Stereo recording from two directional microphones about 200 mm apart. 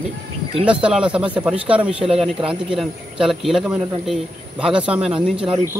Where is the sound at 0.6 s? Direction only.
5° right (ahead or behind).